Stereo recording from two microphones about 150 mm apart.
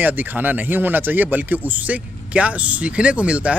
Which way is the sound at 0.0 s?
10° right (ahead or behind).